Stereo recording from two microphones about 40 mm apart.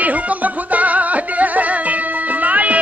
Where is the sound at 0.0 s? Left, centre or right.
Right.